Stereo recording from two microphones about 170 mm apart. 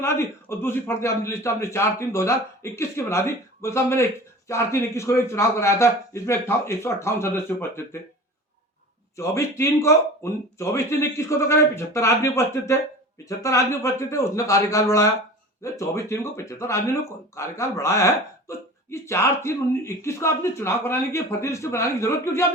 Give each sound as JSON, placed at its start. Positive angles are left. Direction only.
{"t": 0.0, "sound": "a man's voice", "side_deg": 15}
{"t": 9.1, "sound": "a man's voice", "side_deg": 15}